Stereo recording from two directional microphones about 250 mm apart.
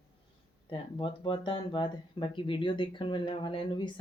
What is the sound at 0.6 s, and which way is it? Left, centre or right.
Speech, centre.